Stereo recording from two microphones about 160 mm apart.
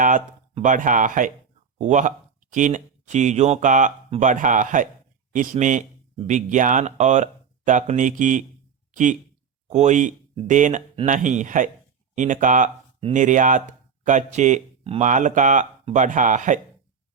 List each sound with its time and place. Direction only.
0.5 s speech: 50° right (ahead or behind)
9.6 s speech: 45° right (ahead or behind)